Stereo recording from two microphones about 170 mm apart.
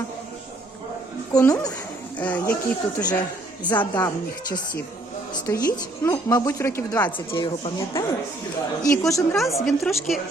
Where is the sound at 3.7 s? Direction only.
25° left (ahead or behind).